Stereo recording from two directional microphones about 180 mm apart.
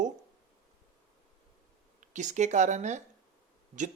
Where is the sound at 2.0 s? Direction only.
40° right (ahead or behind).